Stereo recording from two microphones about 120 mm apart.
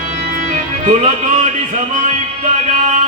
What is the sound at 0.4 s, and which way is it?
Music, 80° right.